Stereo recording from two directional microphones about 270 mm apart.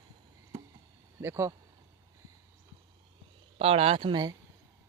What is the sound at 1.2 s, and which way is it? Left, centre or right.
Speech, centre.